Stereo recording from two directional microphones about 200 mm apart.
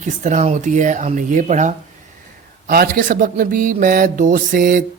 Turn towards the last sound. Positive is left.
turn(degrees=-45)  # may be behind; listen again after turning